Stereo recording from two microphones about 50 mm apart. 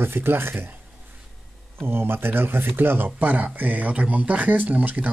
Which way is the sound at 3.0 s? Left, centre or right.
Right.